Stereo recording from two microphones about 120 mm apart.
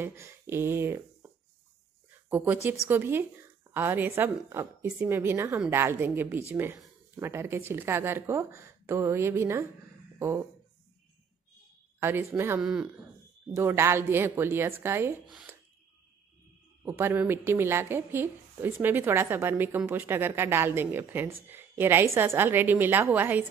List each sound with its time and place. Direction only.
0.0 s speech: 20° right (ahead or behind)
2.2 s speech: 15° right (ahead or behind)
12.0 s speech: 20° right (ahead or behind)
12.6 s a woman's voice: 5° right (ahead or behind)
13.6 s speech: 20° right (ahead or behind)
16.8 s a woman's voice: 20° right (ahead or behind)